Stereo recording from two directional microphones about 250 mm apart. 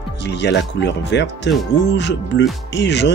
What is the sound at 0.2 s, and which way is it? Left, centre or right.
Speech, left.